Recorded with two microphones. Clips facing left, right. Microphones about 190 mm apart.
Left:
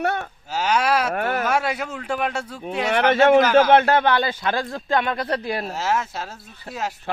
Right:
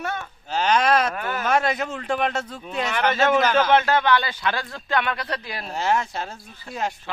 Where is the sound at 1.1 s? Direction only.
65° left (ahead or behind).